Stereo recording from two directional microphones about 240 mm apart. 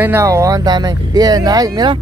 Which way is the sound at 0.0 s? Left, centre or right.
Centre.